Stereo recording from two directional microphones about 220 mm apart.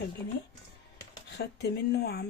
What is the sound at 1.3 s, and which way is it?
Speech, 45° left (ahead or behind).